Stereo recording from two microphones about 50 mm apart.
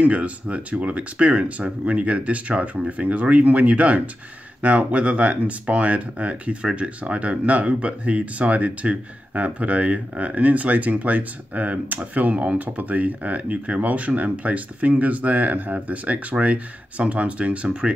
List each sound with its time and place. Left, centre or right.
0.0 s speech: right